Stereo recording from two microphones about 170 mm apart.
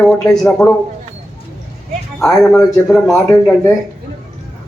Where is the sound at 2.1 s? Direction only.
5° left (ahead or behind).